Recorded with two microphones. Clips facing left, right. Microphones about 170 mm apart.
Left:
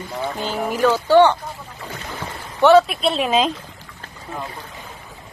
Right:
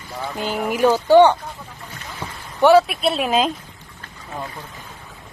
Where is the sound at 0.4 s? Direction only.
10° right (ahead or behind).